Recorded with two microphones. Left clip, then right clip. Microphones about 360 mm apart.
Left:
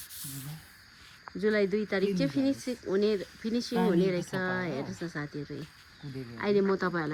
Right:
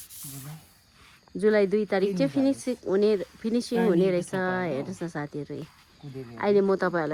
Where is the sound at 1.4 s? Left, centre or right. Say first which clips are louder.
Right 6 dB; right.